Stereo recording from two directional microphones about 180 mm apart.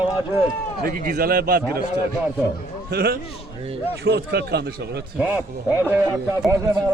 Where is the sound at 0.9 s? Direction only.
50° right (ahead or behind).